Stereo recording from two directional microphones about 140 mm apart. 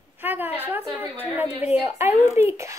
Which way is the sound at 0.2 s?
15° right (ahead or behind).